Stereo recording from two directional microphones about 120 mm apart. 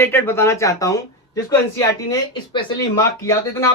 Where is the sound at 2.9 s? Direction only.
25° left (ahead or behind).